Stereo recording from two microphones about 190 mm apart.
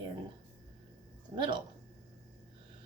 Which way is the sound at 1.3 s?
25° right (ahead or behind).